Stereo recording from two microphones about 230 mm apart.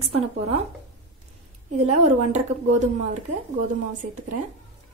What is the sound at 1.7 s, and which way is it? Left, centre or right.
A woman's voice, right.